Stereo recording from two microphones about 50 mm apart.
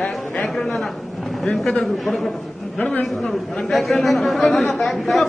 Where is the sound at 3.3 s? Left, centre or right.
Centre.